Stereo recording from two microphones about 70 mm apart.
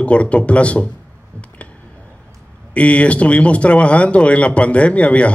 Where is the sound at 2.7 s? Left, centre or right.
Centre.